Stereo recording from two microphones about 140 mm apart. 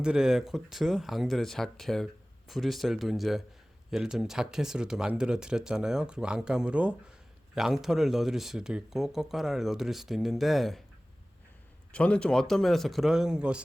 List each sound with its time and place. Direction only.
0.0 s speech: 5° right (ahead or behind)
11.9 s speech: 10° left (ahead or behind)